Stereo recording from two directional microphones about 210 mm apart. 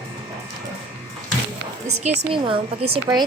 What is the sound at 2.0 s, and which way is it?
A woman's voice, 25° right (ahead or behind).